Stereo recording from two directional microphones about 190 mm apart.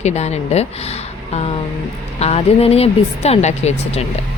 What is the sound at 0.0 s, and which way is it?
Speech, 35° left (ahead or behind).